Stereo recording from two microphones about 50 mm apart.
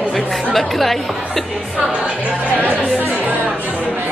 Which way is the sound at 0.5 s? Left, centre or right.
Centre.